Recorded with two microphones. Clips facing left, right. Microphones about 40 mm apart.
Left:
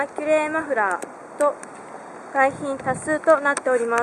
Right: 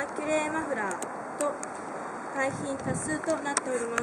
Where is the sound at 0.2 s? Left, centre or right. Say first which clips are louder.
Left 8 dB; left.